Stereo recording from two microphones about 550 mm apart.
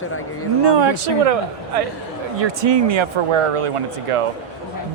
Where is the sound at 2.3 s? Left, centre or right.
Right.